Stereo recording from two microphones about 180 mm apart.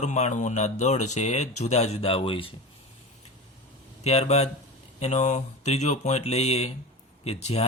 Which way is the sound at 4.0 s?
35° left (ahead or behind).